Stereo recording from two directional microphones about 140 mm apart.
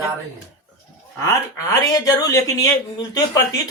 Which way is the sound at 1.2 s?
25° left (ahead or behind).